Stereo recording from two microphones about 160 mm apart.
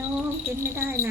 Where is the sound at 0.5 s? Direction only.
15° right (ahead or behind).